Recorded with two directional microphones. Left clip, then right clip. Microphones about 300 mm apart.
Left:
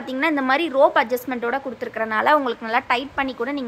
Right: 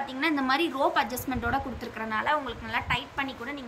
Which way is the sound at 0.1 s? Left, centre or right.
Centre.